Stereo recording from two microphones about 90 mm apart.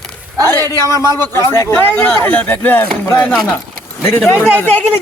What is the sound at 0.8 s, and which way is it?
A man's voice, 35° left (ahead or behind).